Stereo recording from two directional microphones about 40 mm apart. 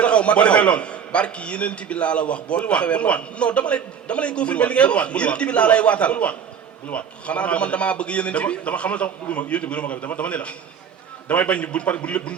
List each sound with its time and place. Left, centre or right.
0.0 s a man's voice: left